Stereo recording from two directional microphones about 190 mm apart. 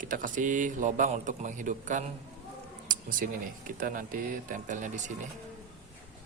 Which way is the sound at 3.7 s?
45° right (ahead or behind).